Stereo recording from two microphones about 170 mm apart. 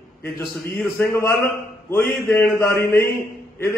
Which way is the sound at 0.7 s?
10° left (ahead or behind).